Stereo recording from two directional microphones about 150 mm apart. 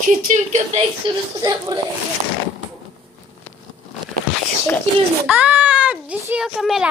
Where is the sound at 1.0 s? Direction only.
35° right (ahead or behind).